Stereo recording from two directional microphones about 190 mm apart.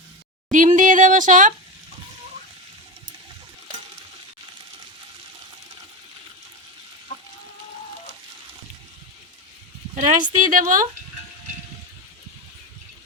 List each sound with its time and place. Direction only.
0.5 s speech: 45° right (ahead or behind)
9.9 s speech: 40° right (ahead or behind)